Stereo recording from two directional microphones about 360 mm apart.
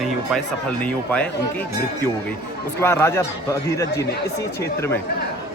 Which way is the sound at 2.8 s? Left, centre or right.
Centre.